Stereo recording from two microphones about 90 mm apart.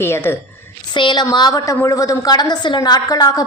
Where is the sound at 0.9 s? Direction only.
55° left (ahead or behind).